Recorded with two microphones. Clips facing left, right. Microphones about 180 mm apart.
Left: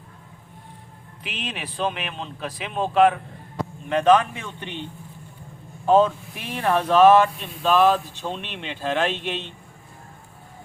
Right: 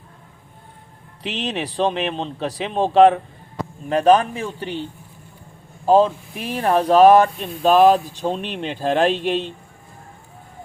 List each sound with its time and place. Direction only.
1.2 s speech: 35° right (ahead or behind)